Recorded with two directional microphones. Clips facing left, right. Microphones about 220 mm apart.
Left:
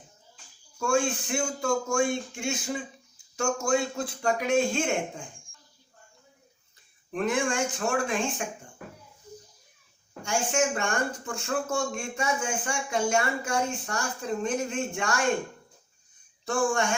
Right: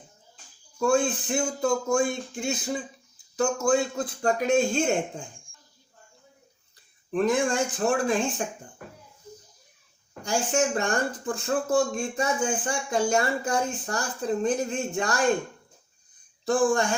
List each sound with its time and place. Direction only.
0.8 s speech: 35° right (ahead or behind)
7.1 s speech: 35° right (ahead or behind)
10.2 s speech: 35° right (ahead or behind)
16.5 s speech: 35° right (ahead or behind)